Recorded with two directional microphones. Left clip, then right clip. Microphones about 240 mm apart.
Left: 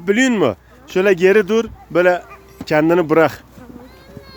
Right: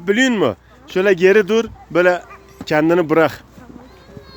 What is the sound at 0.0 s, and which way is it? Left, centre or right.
Speech, centre.